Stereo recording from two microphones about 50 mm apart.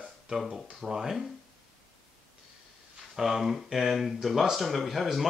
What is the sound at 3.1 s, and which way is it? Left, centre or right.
Speech, centre.